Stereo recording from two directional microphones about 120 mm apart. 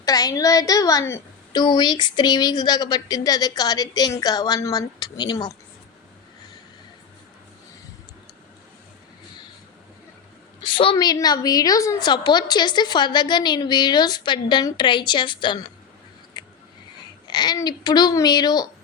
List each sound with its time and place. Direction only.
0.0 s a woman's voice: 30° left (ahead or behind)
1.5 s a woman's voice: 35° left (ahead or behind)
10.6 s a sound: 45° left (ahead or behind)
10.9 s a woman's voice: 35° left (ahead or behind)
16.4 s a sound: 35° left (ahead or behind)
17.2 s a woman's voice: 35° left (ahead or behind)